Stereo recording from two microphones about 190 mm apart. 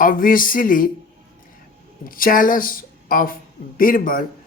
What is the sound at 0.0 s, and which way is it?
Speech, 45° left (ahead or behind).